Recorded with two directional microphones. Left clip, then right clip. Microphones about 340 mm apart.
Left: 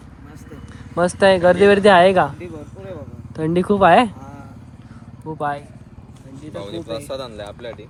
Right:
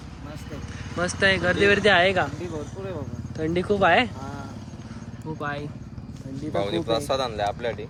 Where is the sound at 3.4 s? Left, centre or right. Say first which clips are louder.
Left 6 dB; centre.